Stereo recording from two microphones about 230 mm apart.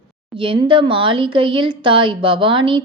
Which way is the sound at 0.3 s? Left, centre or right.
Right.